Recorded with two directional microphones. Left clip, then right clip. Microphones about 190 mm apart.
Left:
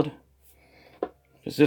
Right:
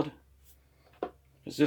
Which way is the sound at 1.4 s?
50° left (ahead or behind).